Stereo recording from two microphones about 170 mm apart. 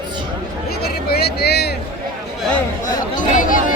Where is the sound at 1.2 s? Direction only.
70° left (ahead or behind).